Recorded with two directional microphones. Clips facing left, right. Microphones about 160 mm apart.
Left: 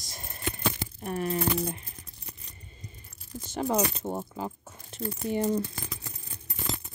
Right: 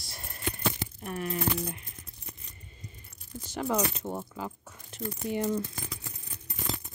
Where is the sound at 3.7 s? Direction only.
25° left (ahead or behind).